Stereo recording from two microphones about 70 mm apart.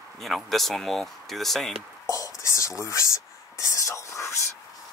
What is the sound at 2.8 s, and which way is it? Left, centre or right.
Speech, left.